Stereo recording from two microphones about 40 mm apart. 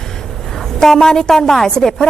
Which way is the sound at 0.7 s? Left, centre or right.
Centre.